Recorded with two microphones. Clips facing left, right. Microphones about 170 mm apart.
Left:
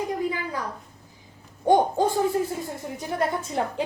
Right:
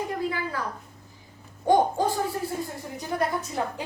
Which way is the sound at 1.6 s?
20° left (ahead or behind).